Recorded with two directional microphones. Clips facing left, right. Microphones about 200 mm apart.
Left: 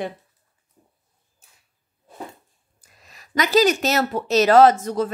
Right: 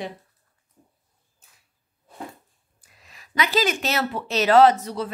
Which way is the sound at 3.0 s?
40° left (ahead or behind).